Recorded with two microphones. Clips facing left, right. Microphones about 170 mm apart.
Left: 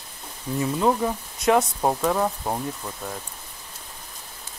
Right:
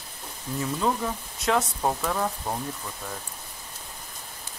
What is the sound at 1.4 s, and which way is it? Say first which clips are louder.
Speech: left 5 dB; 15° left (ahead or behind).